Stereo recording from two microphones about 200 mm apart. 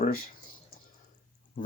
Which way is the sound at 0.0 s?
45° left (ahead or behind).